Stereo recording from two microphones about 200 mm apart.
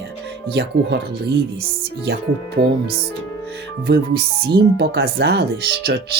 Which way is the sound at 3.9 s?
55° right (ahead or behind).